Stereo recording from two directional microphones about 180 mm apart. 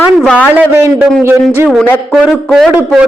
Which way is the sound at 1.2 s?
15° right (ahead or behind).